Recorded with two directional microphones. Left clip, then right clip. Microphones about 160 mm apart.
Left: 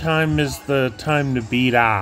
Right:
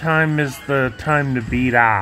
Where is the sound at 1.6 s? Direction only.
30° left (ahead or behind).